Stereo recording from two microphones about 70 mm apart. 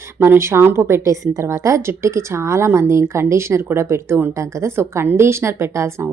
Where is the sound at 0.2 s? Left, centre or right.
Right.